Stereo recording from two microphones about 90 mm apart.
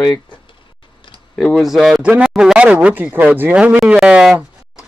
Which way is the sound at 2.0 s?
15° right (ahead or behind).